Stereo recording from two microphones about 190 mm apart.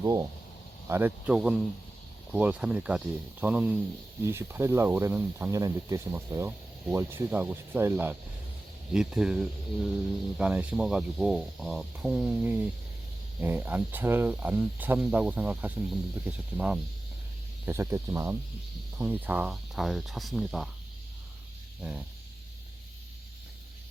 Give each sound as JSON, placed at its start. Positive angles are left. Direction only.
{"t": 0.0, "sound": "speech", "side_deg": -20}